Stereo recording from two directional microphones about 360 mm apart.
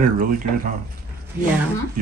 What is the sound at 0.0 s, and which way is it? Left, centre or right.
Speech, right.